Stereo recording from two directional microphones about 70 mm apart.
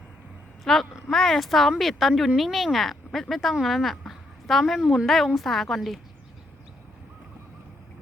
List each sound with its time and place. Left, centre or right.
0.6 s a woman's voice: centre